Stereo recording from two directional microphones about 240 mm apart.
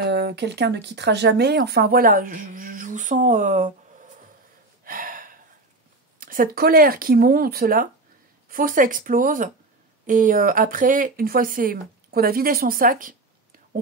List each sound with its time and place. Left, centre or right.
0.0 s speech: right
4.8 s a sound: right
6.1 s speech: right